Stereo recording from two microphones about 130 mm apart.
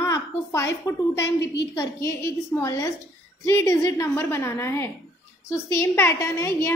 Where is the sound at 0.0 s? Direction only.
20° left (ahead or behind).